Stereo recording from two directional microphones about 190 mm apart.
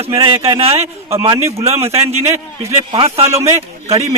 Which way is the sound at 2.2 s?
15° right (ahead or behind).